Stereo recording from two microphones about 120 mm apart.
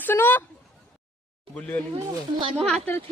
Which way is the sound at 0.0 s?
15° left (ahead or behind).